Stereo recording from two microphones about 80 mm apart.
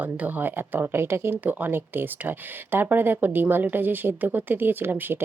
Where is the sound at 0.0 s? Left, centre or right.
Right.